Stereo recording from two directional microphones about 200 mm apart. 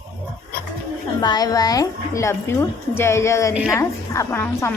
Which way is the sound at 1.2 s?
20° left (ahead or behind).